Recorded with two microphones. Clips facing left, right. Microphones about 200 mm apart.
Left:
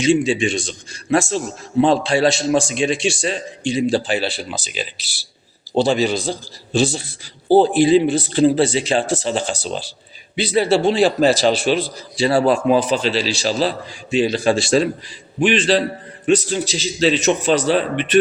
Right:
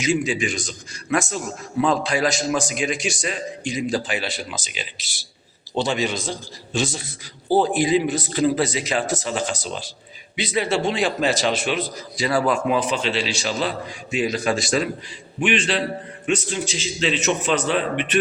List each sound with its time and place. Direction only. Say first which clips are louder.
0.0 s a man's voice: left 6 dB; 30° left (ahead or behind)